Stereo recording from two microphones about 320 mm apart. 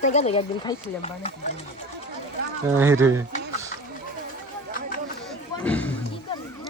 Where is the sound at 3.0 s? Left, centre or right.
Centre.